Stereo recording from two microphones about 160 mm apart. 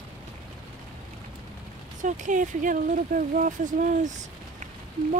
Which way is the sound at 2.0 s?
50° right (ahead or behind).